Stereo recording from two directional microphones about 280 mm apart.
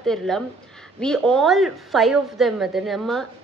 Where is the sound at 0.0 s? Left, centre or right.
Centre.